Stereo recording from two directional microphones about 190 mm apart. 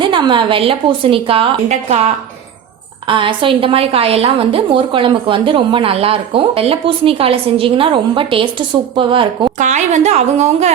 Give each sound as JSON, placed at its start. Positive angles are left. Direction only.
{"t": 0.0, "sound": "a woman's voice", "side_deg": -25}
{"t": 9.6, "sound": "a woman's voice", "side_deg": -40}